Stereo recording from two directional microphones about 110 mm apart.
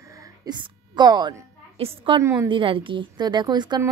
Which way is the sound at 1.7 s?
65° right (ahead or behind).